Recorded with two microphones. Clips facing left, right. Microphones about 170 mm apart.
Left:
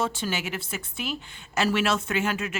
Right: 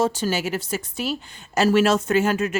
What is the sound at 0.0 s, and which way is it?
A woman's voice, 40° right (ahead or behind).